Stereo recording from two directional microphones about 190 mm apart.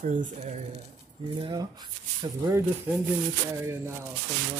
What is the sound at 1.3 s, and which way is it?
Speech, 25° right (ahead or behind).